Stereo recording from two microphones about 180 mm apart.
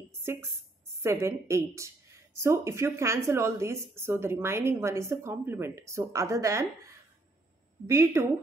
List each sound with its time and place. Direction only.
0.2 s a woman's voice: 15° right (ahead or behind)
7.8 s a woman's voice: 15° right (ahead or behind)